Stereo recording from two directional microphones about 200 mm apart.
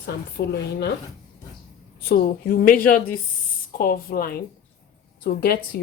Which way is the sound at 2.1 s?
50° left (ahead or behind).